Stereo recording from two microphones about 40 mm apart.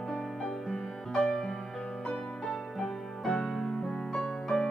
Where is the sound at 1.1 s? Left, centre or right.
Left.